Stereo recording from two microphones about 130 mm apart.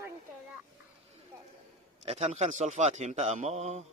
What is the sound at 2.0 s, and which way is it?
A man's voice, 50° right (ahead or behind).